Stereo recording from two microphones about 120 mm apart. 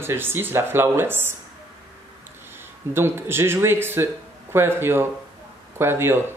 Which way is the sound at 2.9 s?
20° right (ahead or behind).